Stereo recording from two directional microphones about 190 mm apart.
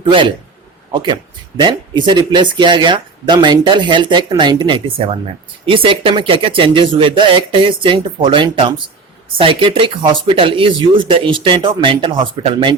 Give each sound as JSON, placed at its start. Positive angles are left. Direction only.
{"t": 0.0, "sound": "speech", "side_deg": -25}